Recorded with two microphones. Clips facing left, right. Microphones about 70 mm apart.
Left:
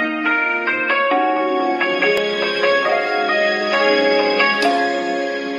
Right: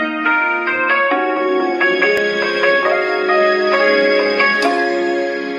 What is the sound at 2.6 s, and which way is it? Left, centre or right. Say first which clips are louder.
Music: right 2 dB; right.